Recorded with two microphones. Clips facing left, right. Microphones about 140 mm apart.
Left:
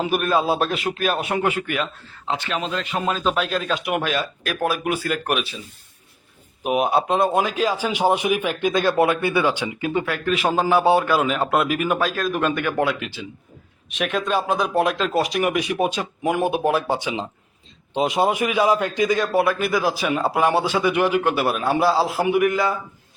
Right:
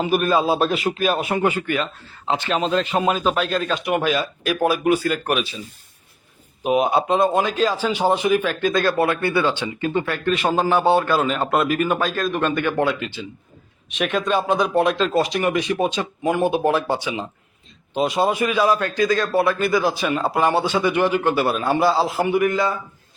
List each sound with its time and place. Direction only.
0.0 s a man's voice: centre (ahead or behind)
2.5 s a man's voice: 30° right (ahead or behind)
3.0 s a man's voice: 10° right (ahead or behind)
3.2 s a man's voice: centre (ahead or behind)
6.6 s a man's voice: 5° left (ahead or behind)